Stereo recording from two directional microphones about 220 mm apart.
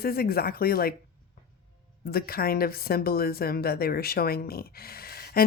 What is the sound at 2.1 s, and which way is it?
Speech, 45° left (ahead or behind).